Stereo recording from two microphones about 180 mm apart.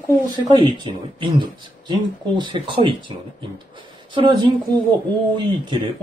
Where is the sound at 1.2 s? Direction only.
25° right (ahead or behind).